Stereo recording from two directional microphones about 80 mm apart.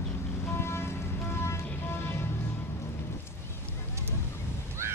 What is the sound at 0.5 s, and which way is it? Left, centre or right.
Vehicle, left.